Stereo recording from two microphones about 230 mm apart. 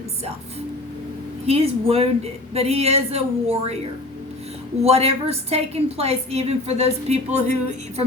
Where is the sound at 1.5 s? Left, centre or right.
Right.